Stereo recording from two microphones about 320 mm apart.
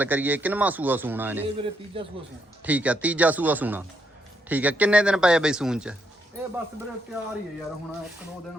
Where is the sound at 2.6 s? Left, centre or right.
Centre.